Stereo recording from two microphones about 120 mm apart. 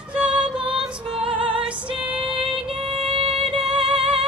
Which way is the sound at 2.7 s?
55° right (ahead or behind).